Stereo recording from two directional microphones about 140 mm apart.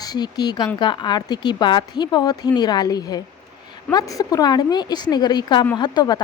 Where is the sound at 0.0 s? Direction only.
30° left (ahead or behind).